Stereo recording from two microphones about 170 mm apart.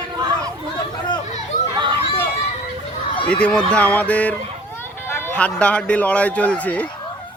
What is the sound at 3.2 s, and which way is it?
Speech, 5° left (ahead or behind).